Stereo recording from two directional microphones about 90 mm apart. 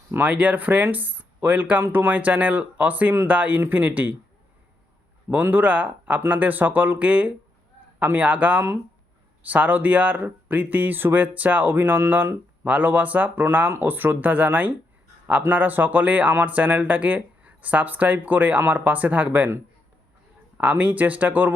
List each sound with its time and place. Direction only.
0.1 s speech: 15° right (ahead or behind)
5.3 s speech: 20° right (ahead or behind)
20.6 s speech: 15° right (ahead or behind)